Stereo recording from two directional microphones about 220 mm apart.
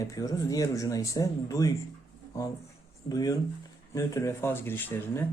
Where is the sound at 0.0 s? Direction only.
15° left (ahead or behind).